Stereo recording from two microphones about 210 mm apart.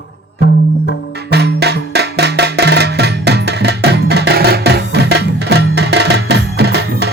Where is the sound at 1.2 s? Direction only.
50° right (ahead or behind).